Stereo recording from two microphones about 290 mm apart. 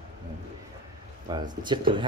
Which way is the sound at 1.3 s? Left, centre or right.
Centre.